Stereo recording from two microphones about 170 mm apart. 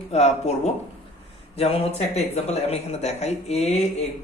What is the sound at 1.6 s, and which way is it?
Speech, 35° left (ahead or behind).